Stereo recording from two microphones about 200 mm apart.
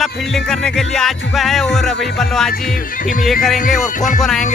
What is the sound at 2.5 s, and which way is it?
Music, 45° left (ahead or behind).